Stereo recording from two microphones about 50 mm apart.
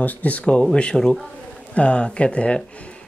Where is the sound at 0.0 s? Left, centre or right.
Left.